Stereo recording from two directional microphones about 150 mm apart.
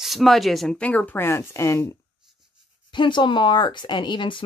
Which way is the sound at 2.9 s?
30° left (ahead or behind).